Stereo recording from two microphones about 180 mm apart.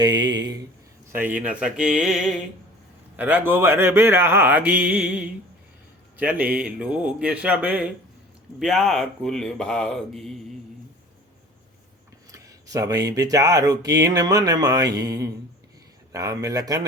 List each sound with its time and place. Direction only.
0.0 s speech: 20° right (ahead or behind)
1.1 s a man's voice: 10° right (ahead or behind)
12.3 s speech: 20° right (ahead or behind)